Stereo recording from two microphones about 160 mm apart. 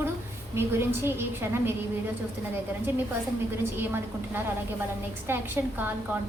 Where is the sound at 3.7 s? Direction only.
15° right (ahead or behind).